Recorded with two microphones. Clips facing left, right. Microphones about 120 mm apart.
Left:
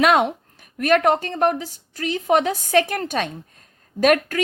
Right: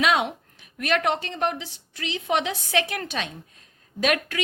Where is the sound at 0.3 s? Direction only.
45° left (ahead or behind).